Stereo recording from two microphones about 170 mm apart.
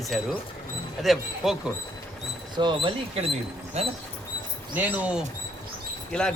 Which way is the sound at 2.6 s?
30° right (ahead or behind).